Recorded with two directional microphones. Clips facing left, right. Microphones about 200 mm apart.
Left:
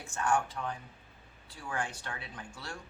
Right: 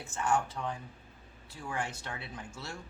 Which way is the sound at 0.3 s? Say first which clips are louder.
Even; 20° right (ahead or behind).